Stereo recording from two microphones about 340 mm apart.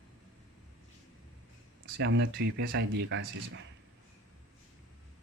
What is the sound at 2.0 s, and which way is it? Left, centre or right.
Speech, right.